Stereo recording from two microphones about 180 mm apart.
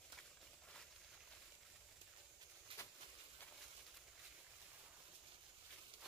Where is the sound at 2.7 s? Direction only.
30° right (ahead or behind).